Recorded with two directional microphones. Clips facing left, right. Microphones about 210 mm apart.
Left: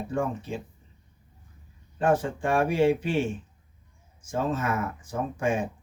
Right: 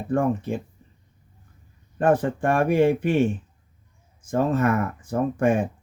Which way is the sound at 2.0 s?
55° right (ahead or behind).